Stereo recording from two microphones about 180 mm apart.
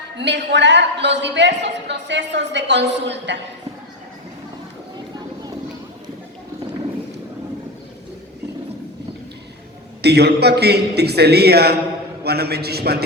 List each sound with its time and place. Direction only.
0.2 s a woman's voice: 75° right (ahead or behind)
10.0 s a man's voice: 65° right (ahead or behind)